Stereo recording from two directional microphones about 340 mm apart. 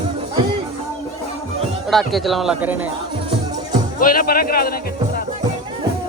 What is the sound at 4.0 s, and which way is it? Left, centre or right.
Speech, left.